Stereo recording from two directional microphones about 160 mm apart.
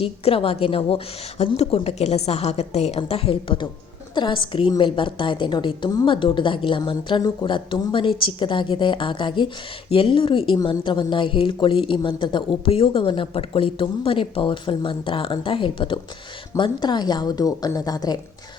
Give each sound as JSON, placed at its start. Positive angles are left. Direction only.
{"t": 0.0, "sound": "a woman's voice", "side_deg": 35}